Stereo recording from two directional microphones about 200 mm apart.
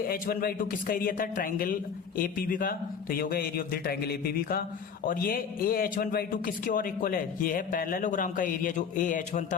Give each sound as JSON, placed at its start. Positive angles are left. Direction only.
{"t": 0.1, "sound": "a man's voice", "side_deg": 45}